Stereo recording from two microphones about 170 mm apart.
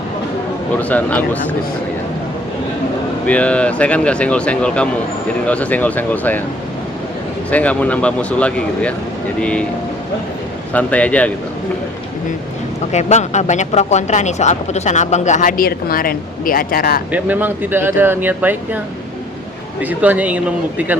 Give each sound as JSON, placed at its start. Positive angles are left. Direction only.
{"t": 0.8, "sound": "speech", "side_deg": 10}
{"t": 3.2, "sound": "speech", "side_deg": 5}
{"t": 7.5, "sound": "speech", "side_deg": 10}
{"t": 10.7, "sound": "speech", "side_deg": 10}
{"t": 12.9, "sound": "speech", "side_deg": 40}
{"t": 17.1, "sound": "speech", "side_deg": -10}
{"t": 19.8, "sound": "speech", "side_deg": -10}